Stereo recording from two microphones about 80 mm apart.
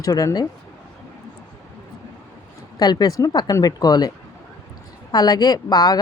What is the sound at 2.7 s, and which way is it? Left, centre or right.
Speech, left.